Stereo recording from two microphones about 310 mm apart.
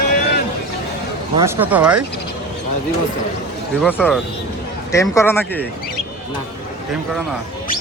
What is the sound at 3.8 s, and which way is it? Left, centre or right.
Speech, centre.